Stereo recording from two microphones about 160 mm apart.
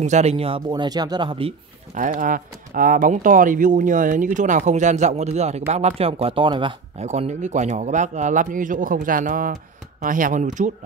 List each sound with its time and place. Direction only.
0.0 s speech: 45° right (ahead or behind)
2.0 s speech: 55° right (ahead or behind); by 7.1 s 30° right (ahead or behind)
7.1 s speech: 45° right (ahead or behind)